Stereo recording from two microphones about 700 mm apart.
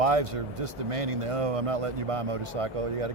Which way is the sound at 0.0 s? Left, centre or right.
Right.